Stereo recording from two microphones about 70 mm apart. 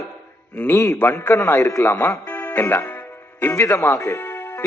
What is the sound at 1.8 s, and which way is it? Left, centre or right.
A man's voice, left.